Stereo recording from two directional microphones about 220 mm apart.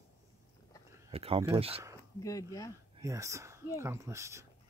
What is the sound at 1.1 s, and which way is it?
Speech, 25° right (ahead or behind).